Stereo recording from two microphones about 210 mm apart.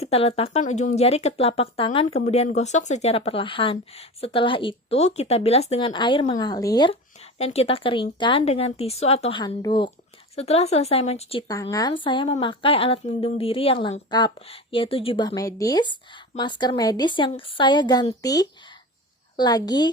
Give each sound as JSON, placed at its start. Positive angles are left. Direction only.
{"t": 0.0, "sound": "speech", "side_deg": 30}
{"t": 7.3, "sound": "speech", "side_deg": 30}